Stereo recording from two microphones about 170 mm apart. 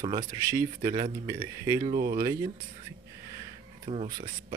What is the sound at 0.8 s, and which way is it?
Speech, 35° right (ahead or behind).